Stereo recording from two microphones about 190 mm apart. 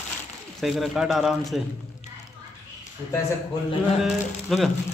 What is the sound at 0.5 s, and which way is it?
Speech, centre (ahead or behind).